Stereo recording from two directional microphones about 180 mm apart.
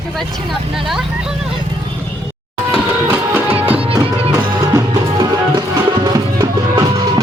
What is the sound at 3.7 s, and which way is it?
Music, 30° right (ahead or behind).